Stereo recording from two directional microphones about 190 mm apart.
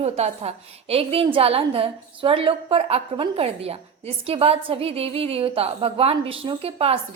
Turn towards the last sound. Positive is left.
turn(degrees=-30)  # may be behind; listen again after turning